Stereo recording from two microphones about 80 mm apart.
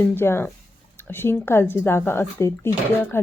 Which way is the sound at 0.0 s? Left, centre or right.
Left.